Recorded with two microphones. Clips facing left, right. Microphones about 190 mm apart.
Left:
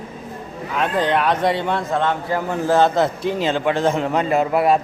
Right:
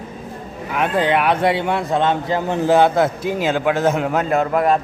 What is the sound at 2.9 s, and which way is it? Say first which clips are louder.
A man's voice: right 1 dB; 5° right (ahead or behind).